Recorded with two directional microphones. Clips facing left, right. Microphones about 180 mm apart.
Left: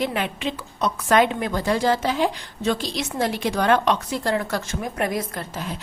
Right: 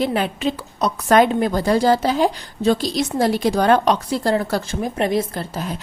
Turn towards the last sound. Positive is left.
turn(degrees=-30)  # may be behind; listen again after turning